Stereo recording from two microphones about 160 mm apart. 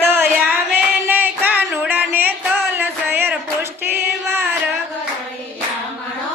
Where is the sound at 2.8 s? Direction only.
10° right (ahead or behind).